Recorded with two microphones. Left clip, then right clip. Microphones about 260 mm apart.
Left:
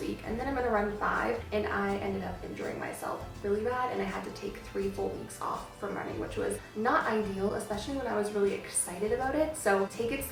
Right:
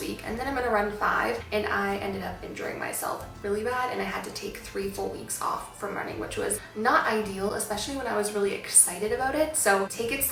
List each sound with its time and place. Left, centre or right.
0.0 s a woman's voice: centre
5.5 s a woman's voice: centre
7.4 s a woman's voice: centre
7.8 s a woman's voice: centre